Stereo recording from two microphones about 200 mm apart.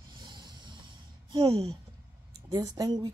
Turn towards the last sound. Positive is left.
turn(degrees=-20)  # may be behind; listen again after turning